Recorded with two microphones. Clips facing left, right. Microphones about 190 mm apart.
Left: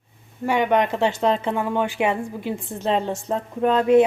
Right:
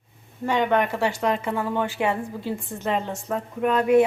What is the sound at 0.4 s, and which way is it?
Speech, 10° left (ahead or behind).